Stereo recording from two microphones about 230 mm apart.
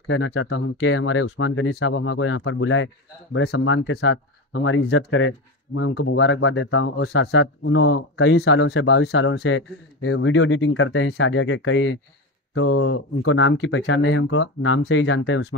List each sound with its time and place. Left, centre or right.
0.1 s speech: left